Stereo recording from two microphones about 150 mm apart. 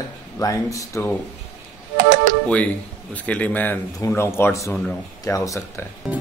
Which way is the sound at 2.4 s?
10° left (ahead or behind).